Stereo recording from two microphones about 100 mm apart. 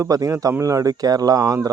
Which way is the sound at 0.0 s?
35° right (ahead or behind).